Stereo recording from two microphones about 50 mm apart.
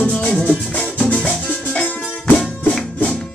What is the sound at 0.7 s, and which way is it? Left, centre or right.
Music, left.